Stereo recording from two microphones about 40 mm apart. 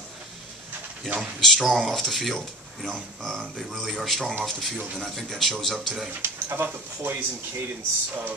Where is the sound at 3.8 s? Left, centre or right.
Centre.